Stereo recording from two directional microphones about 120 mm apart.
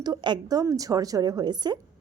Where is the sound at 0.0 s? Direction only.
35° right (ahead or behind).